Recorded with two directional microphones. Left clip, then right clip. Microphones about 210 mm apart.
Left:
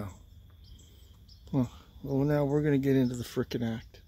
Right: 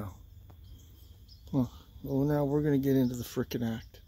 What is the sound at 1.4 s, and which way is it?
Speech, centre (ahead or behind).